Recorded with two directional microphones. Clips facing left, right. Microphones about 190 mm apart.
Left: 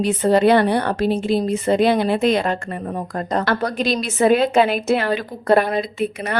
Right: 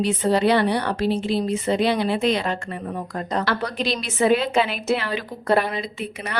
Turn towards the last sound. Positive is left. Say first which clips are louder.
# left 7 dB
turn(degrees=45)  # may be behind; listen again after turning